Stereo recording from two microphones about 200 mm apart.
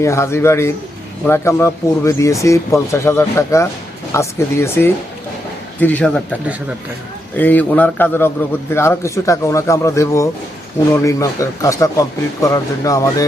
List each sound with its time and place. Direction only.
0.0 s speech: 15° left (ahead or behind)
7.3 s speech: 10° left (ahead or behind)